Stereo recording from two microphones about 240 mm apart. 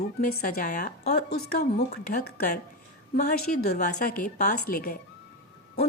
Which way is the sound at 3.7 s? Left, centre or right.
Left.